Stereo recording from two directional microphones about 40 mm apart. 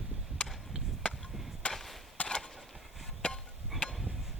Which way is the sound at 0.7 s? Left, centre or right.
Right.